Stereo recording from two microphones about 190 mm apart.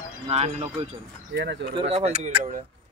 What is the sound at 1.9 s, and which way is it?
Speech, 35° right (ahead or behind).